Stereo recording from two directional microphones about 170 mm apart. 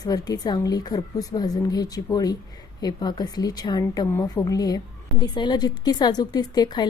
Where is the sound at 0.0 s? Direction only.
25° left (ahead or behind).